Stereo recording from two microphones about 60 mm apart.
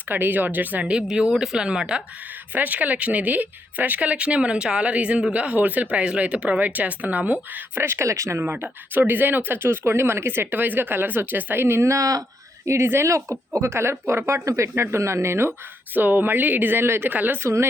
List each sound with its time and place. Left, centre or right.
0.1 s speech: right
1.0 s speech: centre
2.6 s speech: right
7.8 s speech: right
8.0 s speech: right
8.4 s speech: right
12.6 s speech: right
16.0 s speech: right
17.4 s speech: right